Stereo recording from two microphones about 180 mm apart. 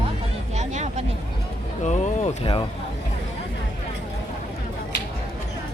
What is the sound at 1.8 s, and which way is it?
Speech, 40° left (ahead or behind).